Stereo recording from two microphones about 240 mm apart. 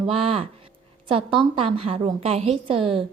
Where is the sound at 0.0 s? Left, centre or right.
Right.